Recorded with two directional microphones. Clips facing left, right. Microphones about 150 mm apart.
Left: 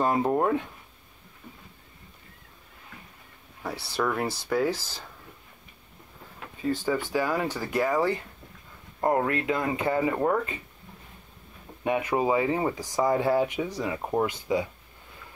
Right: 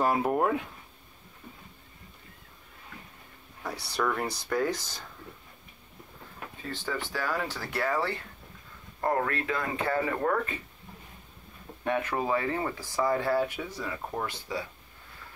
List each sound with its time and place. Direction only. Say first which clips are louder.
0.0 s speech: left 2 dB; 5° right (ahead or behind)
3.8 s speech: left 2 dB; 5° left (ahead or behind)
7.1 s speech: left 5 dB; 15° left (ahead or behind)
11.8 s speech: left 4 dB; 15° left (ahead or behind)